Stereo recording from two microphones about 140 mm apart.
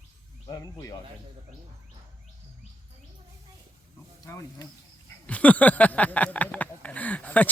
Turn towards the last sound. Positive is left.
turn(degrees=10)  # may be behind; listen again after turning